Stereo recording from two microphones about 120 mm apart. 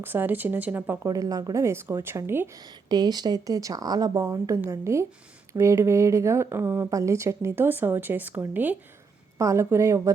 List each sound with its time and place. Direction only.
0.0 s speech: 15° right (ahead or behind)
1.0 s a woman's voice: 30° right (ahead or behind)
2.6 s a woman's voice: 35° right (ahead or behind)